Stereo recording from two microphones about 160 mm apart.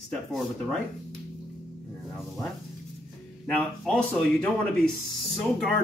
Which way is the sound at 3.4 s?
5° left (ahead or behind).